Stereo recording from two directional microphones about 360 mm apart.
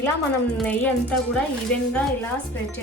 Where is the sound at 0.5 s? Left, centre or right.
Centre.